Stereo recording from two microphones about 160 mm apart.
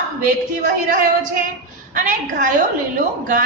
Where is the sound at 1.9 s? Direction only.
55° right (ahead or behind).